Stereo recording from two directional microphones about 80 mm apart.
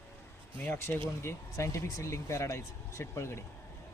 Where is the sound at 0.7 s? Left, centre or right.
Left.